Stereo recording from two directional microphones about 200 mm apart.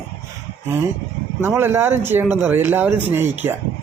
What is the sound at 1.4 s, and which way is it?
Speech, 10° right (ahead or behind).